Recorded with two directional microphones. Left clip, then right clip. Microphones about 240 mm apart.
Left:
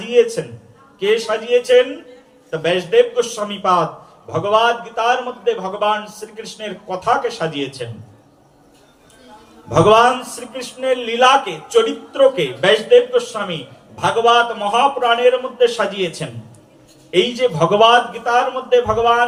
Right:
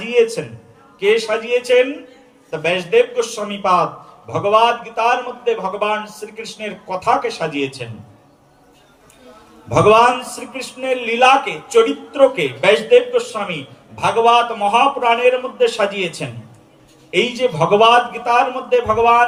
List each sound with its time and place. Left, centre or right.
0.0 s a sound: centre
0.9 s a man's voice: centre
9.6 s a man's voice: centre